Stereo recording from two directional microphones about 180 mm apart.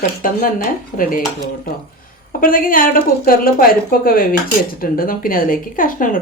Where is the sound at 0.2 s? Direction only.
50° left (ahead or behind).